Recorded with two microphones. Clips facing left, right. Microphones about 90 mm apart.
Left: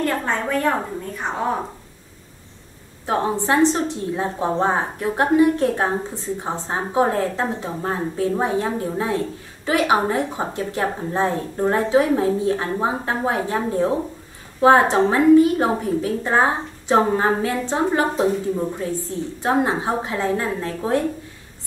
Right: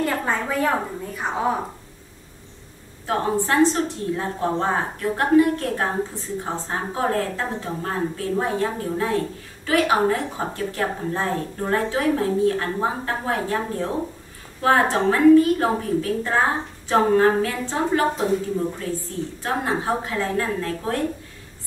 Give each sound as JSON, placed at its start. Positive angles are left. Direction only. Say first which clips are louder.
{"t": 0.0, "sound": "a woman's voice", "louder": "left 1 dB", "side_deg": -5}
{"t": 3.1, "sound": "speech", "louder": "left 2 dB", "side_deg": 20}
{"t": 19.4, "sound": "speech", "louder": "left 4 dB", "side_deg": 20}